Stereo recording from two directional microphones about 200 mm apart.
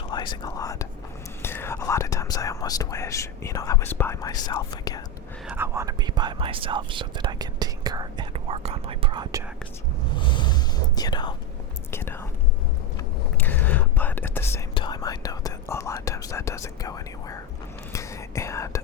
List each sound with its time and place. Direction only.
0.1 s whispering: 20° left (ahead or behind)
1.4 s speech: 10° left (ahead or behind)
5.5 s speech: 10° right (ahead or behind)
10.2 s speech: 25° left (ahead or behind)
11.9 s whispering: 10° left (ahead or behind)
14.8 s speech: 20° left (ahead or behind)
17.9 s whispering: 15° left (ahead or behind)